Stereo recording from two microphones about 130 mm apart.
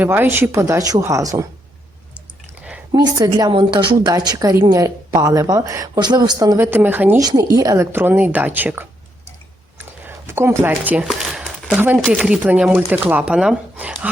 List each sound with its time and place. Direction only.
0.0 s speech: 15° right (ahead or behind)
2.9 s speech: 35° right (ahead or behind)
6.6 s speech: 15° right (ahead or behind)
7.2 s speech: 25° right (ahead or behind)
10.0 s speech: 15° right (ahead or behind)
11.0 s speech: centre (ahead or behind)